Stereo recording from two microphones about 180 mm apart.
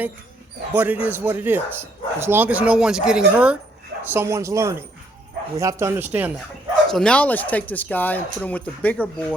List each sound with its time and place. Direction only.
0.7 s speech: 10° right (ahead or behind)
6.8 s speech: 5° left (ahead or behind)